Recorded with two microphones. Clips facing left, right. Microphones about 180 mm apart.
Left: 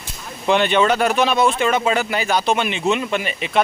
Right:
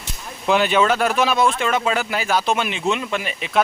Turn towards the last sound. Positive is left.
turn(degrees=0)  # may be behind; listen again after turning